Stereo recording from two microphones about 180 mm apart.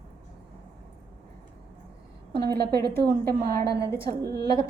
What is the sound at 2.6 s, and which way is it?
A woman's voice, 60° right (ahead or behind).